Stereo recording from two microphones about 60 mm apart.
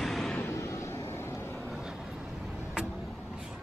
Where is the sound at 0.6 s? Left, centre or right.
Left.